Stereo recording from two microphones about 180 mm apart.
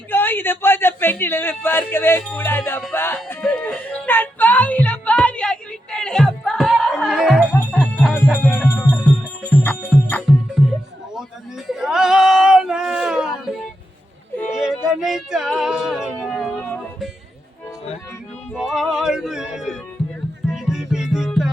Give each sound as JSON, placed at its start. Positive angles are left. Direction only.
{"t": 0.1, "sound": "a man's voice", "side_deg": 10}
{"t": 2.3, "sound": "music", "side_deg": 10}
{"t": 8.7, "sound": "music", "side_deg": 10}
{"t": 9.9, "sound": "music", "side_deg": -5}
{"t": 11.7, "sound": "a sound", "side_deg": -5}
{"t": 14.5, "sound": "yodeling", "side_deg": -5}
{"t": 14.8, "sound": "music", "side_deg": -5}
{"t": 18.5, "sound": "music", "side_deg": 0}